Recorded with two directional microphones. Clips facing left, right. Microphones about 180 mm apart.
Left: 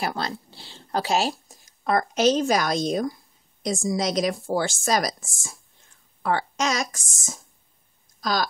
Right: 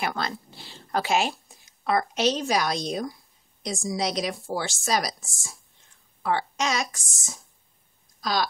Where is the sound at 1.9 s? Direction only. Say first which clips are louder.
Left 2 dB; 45° left (ahead or behind).